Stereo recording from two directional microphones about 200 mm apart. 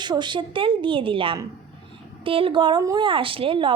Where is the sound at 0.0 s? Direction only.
20° right (ahead or behind).